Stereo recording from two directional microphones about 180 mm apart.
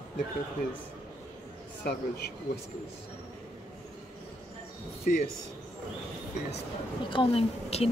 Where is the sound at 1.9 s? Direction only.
65° left (ahead or behind).